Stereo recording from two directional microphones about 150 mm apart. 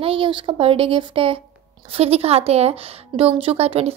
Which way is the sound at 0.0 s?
35° right (ahead or behind).